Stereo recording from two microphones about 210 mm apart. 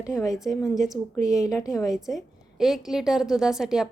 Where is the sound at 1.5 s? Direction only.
15° left (ahead or behind).